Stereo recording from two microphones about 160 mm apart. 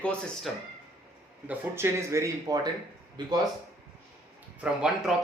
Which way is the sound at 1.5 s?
15° right (ahead or behind).